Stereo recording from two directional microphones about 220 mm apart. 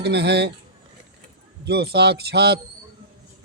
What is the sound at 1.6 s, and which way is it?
Speech, 50° right (ahead or behind).